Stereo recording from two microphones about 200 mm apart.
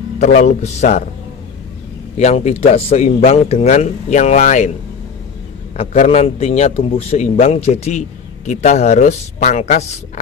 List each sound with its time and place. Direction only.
0.2 s a man's voice: 35° left (ahead or behind)
2.1 s a man's voice: 35° left (ahead or behind)
5.8 s a man's voice: 30° left (ahead or behind)